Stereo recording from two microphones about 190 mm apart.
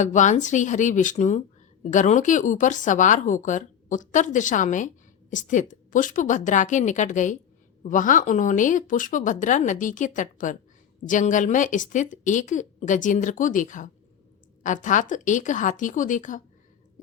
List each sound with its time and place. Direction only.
0.0 s speech: 40° left (ahead or behind)